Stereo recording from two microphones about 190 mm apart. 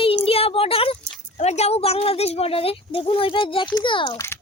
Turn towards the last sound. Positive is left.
turn(degrees=25)  # may be behind; listen again after turning